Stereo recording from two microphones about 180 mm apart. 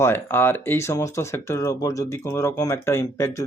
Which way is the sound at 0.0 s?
10° left (ahead or behind).